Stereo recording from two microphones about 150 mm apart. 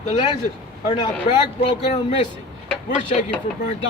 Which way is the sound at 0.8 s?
30° left (ahead or behind).